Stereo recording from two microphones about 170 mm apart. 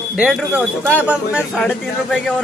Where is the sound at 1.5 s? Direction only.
5° left (ahead or behind).